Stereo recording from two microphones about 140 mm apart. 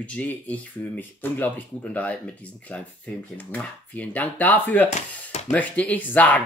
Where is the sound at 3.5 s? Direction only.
10° left (ahead or behind).